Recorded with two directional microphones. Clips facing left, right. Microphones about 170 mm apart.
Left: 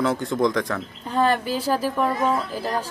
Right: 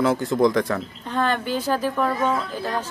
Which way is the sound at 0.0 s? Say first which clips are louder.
Right 2 dB; centre (ahead or behind).